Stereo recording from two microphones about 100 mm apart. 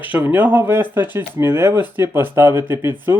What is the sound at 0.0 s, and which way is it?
Speech, 15° right (ahead or behind).